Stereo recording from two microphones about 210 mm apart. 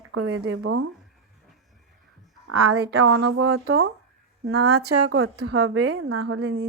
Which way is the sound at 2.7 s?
50° right (ahead or behind).